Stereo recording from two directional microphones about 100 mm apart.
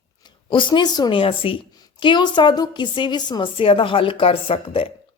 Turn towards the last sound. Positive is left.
turn(degrees=65)  # may be behind; listen again after turning